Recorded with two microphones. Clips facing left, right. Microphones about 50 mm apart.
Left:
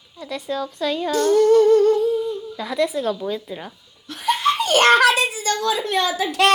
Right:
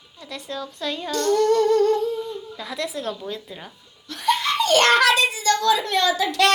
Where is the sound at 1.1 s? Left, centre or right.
Centre.